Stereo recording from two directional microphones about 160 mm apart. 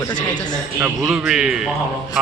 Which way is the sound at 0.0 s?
25° left (ahead or behind).